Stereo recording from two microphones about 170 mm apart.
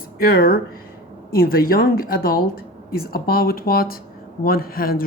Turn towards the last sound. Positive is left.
turn(degrees=60)  # may be behind; listen again after turning